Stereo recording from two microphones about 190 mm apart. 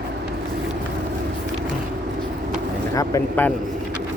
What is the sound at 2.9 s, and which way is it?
Speech, 15° left (ahead or behind).